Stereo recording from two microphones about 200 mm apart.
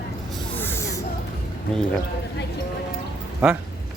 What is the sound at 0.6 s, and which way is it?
Snake, 10° left (ahead or behind).